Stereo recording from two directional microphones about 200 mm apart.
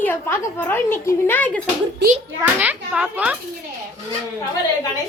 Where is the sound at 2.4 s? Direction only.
5° right (ahead or behind).